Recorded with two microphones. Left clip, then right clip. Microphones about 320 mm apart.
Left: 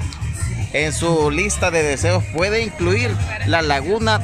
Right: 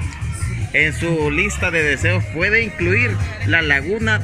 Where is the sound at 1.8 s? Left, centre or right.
Left.